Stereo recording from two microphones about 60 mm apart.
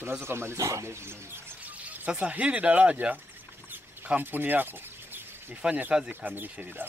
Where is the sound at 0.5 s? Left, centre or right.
Right.